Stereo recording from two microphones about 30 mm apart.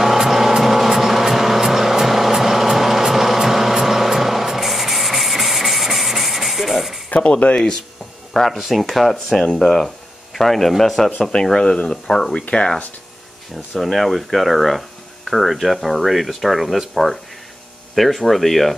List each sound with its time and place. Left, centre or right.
0.0 s vehicle: centre
3.8 s rub: centre
7.1 s speech: left
8.3 s speech: centre
8.5 s speech: centre
9.1 s speech: centre
11.5 s speech: left
12.4 s speech: left
13.7 s speech: centre